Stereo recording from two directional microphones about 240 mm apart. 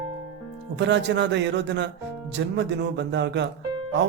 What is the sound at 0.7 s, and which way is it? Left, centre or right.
Speech, right.